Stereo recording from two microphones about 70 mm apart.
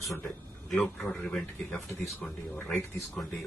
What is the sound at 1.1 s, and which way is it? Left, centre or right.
A man's voice, centre.